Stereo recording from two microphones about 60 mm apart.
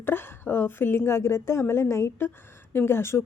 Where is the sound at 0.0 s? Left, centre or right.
Left.